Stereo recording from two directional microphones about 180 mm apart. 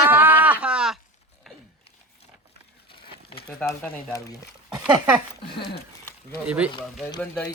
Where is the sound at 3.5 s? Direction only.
5° left (ahead or behind).